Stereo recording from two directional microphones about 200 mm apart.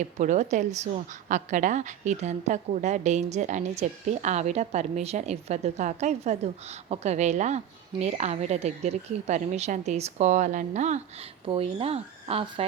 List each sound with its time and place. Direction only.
0.0 s a woman's voice: 35° right (ahead or behind)